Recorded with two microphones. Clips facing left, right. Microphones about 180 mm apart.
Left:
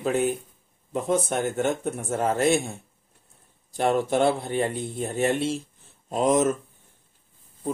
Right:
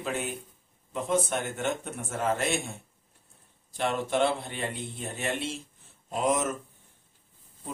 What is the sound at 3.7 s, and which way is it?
A man's voice, 45° left (ahead or behind).